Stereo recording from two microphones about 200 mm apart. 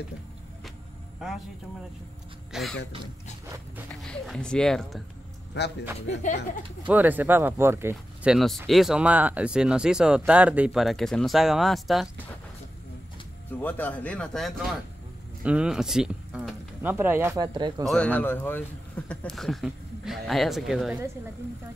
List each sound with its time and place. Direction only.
2.5 s speech: centre (ahead or behind)
3.4 s speech: 15° right (ahead or behind)
4.0 s speech: 5° left (ahead or behind)
5.5 s a man's voice: 60° left (ahead or behind)
6.2 s speech: 35° left (ahead or behind)
6.9 s speech: 10° right (ahead or behind)
13.6 s speech: 10° left (ahead or behind); by 17.8 s 20° right (ahead or behind)
17.8 s speech: 5° left (ahead or behind)